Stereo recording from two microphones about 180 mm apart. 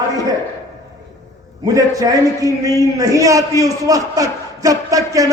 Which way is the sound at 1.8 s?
20° right (ahead or behind).